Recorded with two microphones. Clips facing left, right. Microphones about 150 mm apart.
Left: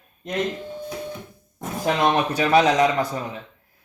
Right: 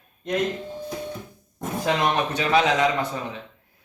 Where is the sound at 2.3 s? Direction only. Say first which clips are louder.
Left 4 dB; 35° left (ahead or behind).